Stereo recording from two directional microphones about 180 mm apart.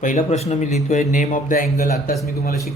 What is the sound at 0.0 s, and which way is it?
A man's voice, 45° left (ahead or behind).